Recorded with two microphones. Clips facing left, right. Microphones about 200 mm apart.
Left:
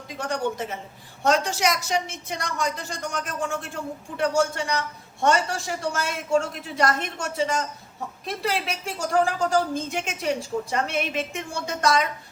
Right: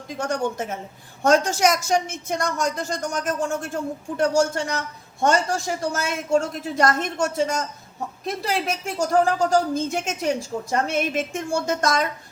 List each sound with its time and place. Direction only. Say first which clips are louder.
0.2 s a woman's voice: right 2 dB; 45° right (ahead or behind)